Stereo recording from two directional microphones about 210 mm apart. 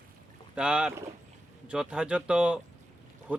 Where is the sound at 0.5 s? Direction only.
5° right (ahead or behind).